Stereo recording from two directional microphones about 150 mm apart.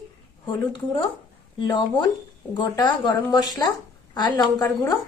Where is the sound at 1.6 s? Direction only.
35° left (ahead or behind).